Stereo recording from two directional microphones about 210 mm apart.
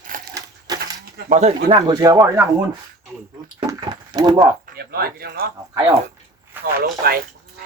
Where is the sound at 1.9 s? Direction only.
20° right (ahead or behind).